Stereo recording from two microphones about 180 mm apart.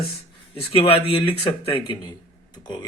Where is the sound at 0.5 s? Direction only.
30° left (ahead or behind).